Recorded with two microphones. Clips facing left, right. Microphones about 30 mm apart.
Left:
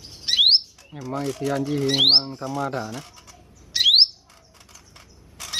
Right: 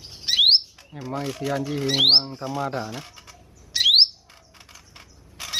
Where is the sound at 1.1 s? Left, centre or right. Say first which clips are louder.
Left 2 dB; centre.